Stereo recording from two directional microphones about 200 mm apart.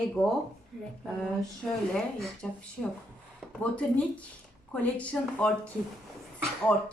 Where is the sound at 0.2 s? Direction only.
5° left (ahead or behind).